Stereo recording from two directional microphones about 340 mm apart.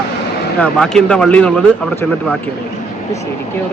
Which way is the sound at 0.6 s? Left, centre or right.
Centre.